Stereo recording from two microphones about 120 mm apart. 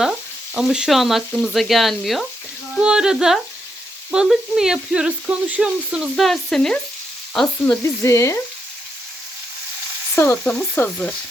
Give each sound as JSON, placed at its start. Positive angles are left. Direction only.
{"t": 0.5, "sound": "speech", "side_deg": -5}
{"t": 7.3, "sound": "frying", "side_deg": 10}
{"t": 8.0, "sound": "frying", "side_deg": 25}
{"t": 10.2, "sound": "frying", "side_deg": 20}
{"t": 10.8, "sound": "frying", "side_deg": 10}